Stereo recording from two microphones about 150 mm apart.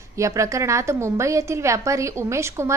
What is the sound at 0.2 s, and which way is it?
A woman's voice, 20° right (ahead or behind).